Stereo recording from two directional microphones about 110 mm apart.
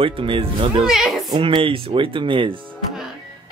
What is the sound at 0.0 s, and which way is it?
Speech, 55° right (ahead or behind).